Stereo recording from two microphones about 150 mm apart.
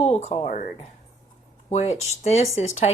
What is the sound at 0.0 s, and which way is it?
Speech, 45° left (ahead or behind).